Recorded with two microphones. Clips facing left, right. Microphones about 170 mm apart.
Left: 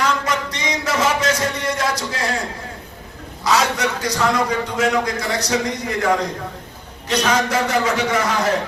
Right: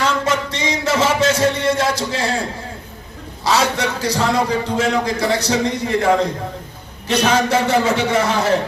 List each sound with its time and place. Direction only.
0.0 s music: 25° right (ahead or behind)
3.4 s a man's voice: 30° right (ahead or behind)